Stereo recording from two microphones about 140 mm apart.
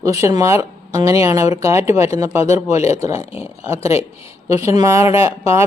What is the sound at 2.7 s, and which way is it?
Speech, 50° left (ahead or behind).